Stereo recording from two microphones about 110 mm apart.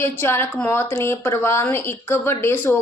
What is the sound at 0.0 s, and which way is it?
A woman's voice, 20° left (ahead or behind).